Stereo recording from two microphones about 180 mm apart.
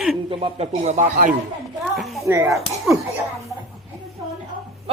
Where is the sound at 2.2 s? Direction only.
15° right (ahead or behind).